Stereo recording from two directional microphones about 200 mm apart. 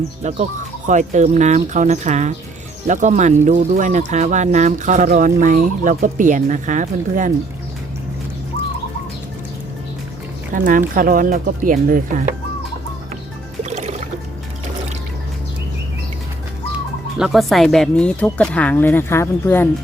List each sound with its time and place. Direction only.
0.2 s speech: 35° right (ahead or behind)
10.5 s speech: 40° right (ahead or behind)
13.7 s music: 35° right (ahead or behind)
17.2 s speech: centre (ahead or behind)